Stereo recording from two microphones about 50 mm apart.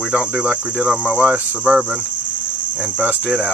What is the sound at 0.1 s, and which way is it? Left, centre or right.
Cricket, right.